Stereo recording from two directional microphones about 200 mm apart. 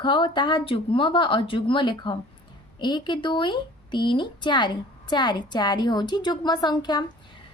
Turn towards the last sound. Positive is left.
turn(degrees=20)  # may be behind; listen again after turning